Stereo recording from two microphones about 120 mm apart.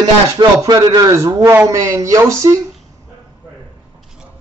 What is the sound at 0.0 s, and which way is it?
A man's voice, 35° right (ahead or behind).